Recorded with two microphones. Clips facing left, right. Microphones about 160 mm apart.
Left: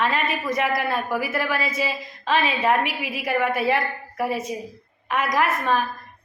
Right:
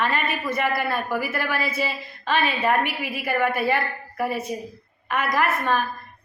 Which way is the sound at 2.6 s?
10° left (ahead or behind).